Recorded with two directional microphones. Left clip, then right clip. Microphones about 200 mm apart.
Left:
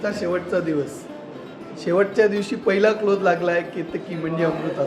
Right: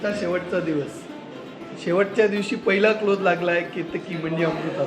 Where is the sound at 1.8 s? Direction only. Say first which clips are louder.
Left 2 dB; 5° left (ahead or behind).